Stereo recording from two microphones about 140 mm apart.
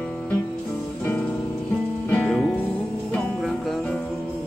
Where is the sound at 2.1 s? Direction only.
10° left (ahead or behind).